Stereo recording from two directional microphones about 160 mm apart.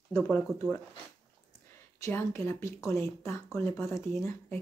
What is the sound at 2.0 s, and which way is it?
Speech, 15° left (ahead or behind).